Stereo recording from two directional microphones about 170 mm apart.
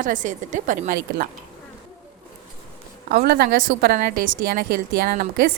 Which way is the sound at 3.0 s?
65° right (ahead or behind).